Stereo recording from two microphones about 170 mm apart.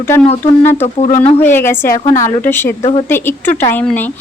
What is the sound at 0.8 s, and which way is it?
Speech, 40° left (ahead or behind).